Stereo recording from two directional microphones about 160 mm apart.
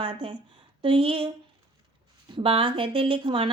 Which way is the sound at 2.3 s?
35° right (ahead or behind).